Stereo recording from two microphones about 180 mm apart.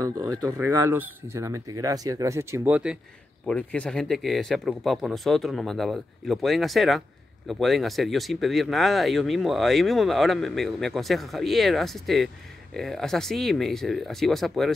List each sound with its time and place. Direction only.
0.5 s speech: 15° right (ahead or behind)
3.4 s speech: 5° left (ahead or behind)